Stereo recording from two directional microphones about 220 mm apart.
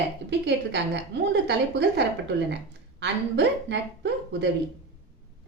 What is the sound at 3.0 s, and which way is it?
A woman's voice, 50° right (ahead or behind).